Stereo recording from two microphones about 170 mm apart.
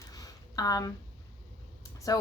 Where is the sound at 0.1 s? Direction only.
20° left (ahead or behind).